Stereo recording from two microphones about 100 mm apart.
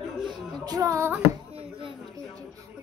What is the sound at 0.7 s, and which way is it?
Female singing, 35° right (ahead or behind).